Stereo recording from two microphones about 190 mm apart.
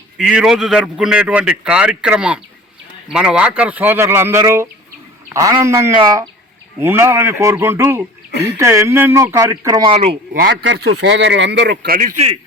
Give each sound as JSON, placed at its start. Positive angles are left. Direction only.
{"t": 0.2, "sound": "speech", "side_deg": -5}
{"t": 10.5, "sound": "speech", "side_deg": -75}